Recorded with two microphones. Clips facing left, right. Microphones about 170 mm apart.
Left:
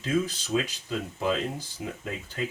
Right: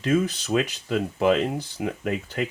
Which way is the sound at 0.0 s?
65° right (ahead or behind).